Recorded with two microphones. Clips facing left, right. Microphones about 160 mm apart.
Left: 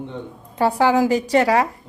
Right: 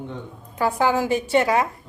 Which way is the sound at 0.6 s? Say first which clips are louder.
Left 4 dB; 30° left (ahead or behind).